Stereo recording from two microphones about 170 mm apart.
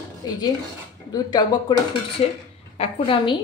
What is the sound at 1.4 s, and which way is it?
Speech, 25° left (ahead or behind).